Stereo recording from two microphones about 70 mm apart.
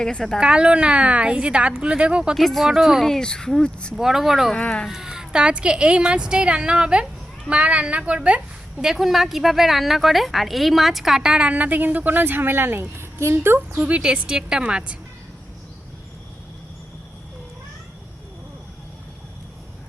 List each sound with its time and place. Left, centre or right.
0.0 s speech: centre
0.3 s a woman's voice: centre
2.3 s speech: centre
3.0 s speech: centre
3.9 s speech: centre
4.5 s speech: centre
4.9 s a woman's voice: centre
8.8 s a woman's voice: centre; by 13.8 s right
13.8 s a woman's voice: centre